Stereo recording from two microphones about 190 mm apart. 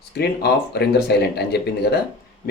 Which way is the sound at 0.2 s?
60° left (ahead or behind).